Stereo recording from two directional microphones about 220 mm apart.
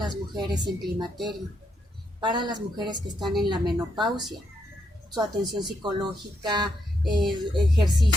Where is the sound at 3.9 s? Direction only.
20° right (ahead or behind).